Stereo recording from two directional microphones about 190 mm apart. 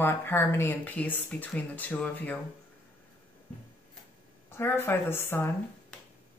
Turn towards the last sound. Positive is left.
turn(degrees=10)  # may be behind; listen again after turning